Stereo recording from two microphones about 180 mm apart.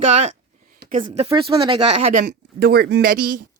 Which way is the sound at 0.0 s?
40° right (ahead or behind).